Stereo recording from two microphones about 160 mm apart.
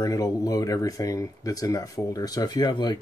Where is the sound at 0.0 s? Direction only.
20° left (ahead or behind).